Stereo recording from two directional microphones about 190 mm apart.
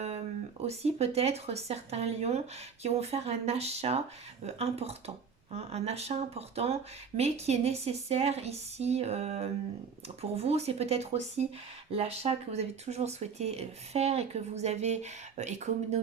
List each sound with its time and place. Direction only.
0.6 s speech: 35° right (ahead or behind)